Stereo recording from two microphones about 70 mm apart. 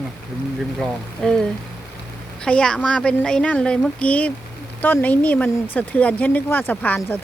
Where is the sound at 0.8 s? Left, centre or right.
Centre.